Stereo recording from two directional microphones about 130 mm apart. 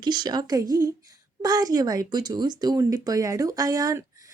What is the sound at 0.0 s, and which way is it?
A woman's voice, 35° right (ahead or behind).